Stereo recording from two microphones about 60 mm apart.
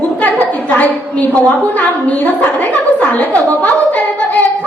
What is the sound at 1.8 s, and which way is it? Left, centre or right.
A woman's voice, left.